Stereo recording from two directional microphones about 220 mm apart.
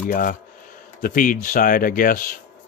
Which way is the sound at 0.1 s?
40° left (ahead or behind).